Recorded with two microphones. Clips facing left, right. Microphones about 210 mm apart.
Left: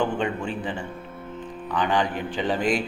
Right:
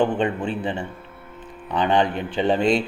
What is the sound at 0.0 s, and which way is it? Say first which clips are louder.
A man's voice: right 4 dB; 20° right (ahead or behind).